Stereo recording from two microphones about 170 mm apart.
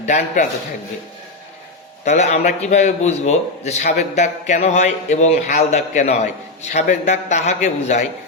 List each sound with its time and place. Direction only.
0.0 s a man's voice: 45° left (ahead or behind)
2.0 s a man's voice: 40° left (ahead or behind)